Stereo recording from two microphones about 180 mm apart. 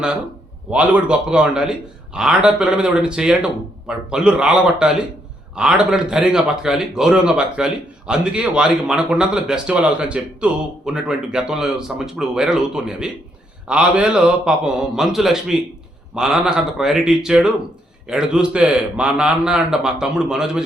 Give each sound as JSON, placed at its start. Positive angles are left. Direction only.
{"t": 0.7, "sound": "a man's voice", "side_deg": -5}